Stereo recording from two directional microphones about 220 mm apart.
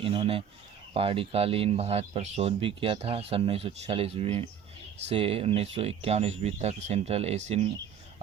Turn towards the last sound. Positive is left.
turn(degrees=-30)  # may be behind; listen again after turning